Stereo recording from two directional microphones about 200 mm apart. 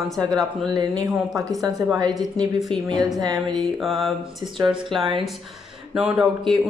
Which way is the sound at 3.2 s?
20° right (ahead or behind).